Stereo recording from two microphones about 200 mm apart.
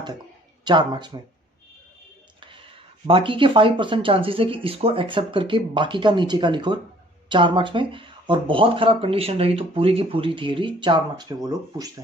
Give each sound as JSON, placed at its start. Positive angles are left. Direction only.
{"t": 0.7, "sound": "speech", "side_deg": -20}
{"t": 3.1, "sound": "speech", "side_deg": -25}